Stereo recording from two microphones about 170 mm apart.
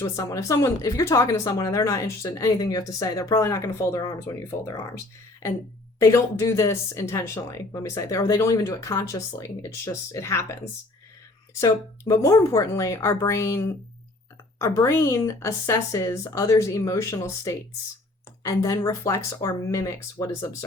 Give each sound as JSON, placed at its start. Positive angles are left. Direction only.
{"t": 0.0, "sound": "speech", "side_deg": 20}
{"t": 11.6, "sound": "speech", "side_deg": 20}